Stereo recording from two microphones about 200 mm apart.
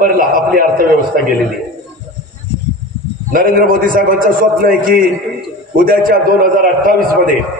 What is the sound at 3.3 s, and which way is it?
A man's voice, 45° right (ahead or behind).